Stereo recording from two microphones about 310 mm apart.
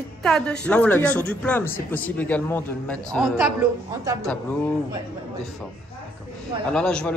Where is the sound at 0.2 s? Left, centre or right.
Centre.